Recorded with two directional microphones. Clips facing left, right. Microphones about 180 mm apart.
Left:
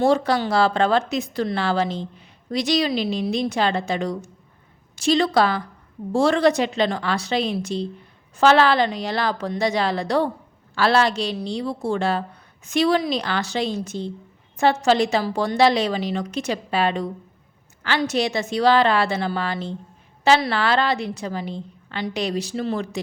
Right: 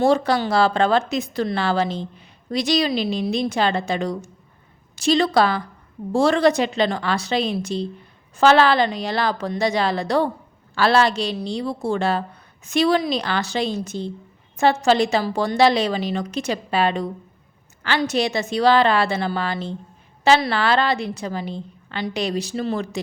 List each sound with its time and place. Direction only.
0.0 s a woman's voice: 35° right (ahead or behind)